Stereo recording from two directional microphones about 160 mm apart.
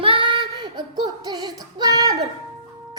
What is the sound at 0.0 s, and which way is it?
Female singing, 35° right (ahead or behind).